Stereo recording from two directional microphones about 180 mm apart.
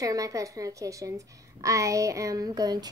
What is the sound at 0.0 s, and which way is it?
A woman's voice, 20° right (ahead or behind).